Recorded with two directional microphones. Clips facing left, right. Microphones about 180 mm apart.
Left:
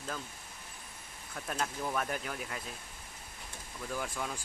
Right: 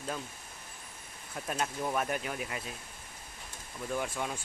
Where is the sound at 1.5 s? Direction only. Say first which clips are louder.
Right 2 dB; 10° right (ahead or behind).